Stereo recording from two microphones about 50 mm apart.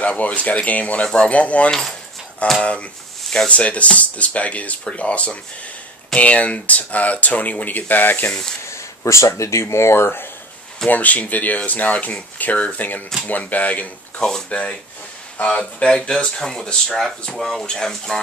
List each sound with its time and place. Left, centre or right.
0.0 s speech: left
1.0 s speech: centre; by 8.3 s left
8.6 s speech: left
10.9 s speech: left; by 17.0 s centre
17.4 s speech: centre